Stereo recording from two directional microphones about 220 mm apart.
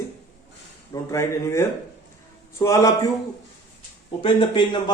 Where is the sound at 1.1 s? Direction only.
15° left (ahead or behind).